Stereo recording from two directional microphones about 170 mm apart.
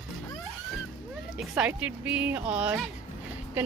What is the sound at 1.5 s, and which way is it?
Speech, 10° right (ahead or behind).